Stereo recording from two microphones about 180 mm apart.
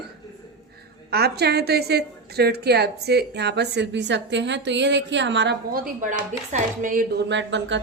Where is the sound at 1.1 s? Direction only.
65° right (ahead or behind); by 7.0 s 45° right (ahead or behind).